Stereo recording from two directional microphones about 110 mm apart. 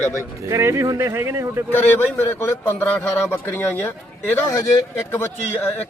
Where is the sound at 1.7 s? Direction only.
15° left (ahead or behind).